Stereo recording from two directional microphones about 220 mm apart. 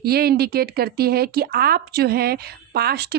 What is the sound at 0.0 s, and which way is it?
Speech, 45° right (ahead or behind).